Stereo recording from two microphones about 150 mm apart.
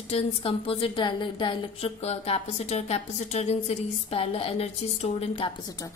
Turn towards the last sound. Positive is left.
turn(degrees=40)  # may be behind; listen again after turning